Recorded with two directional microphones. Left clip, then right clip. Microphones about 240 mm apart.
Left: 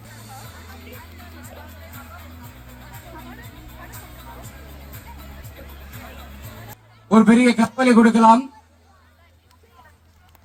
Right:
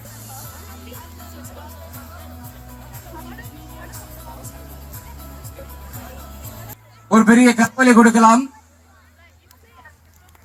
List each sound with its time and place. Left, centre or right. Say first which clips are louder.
7.1 s a man's voice: right 2 dB; left